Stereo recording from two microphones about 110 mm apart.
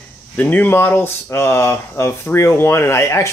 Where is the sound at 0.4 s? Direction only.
15° left (ahead or behind).